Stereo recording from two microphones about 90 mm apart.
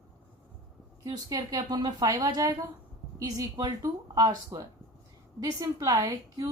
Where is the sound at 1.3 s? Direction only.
45° right (ahead or behind).